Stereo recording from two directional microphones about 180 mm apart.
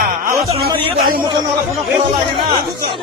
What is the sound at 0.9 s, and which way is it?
Speech, 55° right (ahead or behind).